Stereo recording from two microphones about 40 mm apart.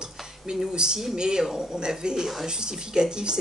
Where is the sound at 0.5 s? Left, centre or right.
Centre.